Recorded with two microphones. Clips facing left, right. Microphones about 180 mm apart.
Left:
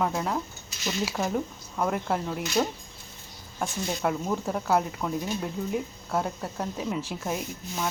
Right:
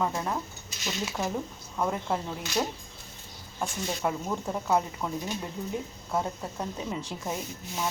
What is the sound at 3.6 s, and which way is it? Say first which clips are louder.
Speech: left 2 dB; 5° left (ahead or behind).